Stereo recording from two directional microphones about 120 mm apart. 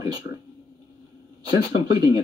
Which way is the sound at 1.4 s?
35° right (ahead or behind).